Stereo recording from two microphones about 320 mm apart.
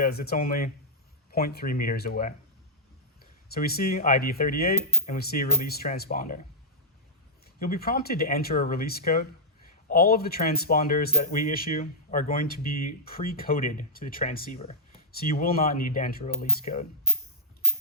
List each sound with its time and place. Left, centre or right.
0.0 s speech: left
3.5 s speech: left
7.4 s speech: left